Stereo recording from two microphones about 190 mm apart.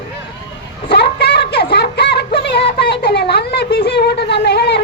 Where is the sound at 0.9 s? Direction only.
60° left (ahead or behind).